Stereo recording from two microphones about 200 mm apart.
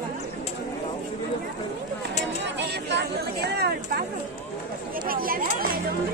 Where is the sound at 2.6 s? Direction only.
60° right (ahead or behind).